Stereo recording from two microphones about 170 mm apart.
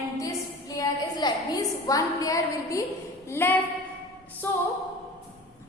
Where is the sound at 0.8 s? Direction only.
20° left (ahead or behind).